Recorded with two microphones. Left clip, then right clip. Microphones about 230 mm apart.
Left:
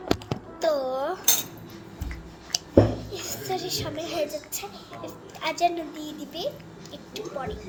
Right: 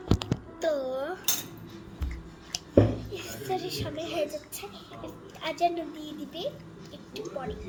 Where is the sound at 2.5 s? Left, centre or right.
Centre.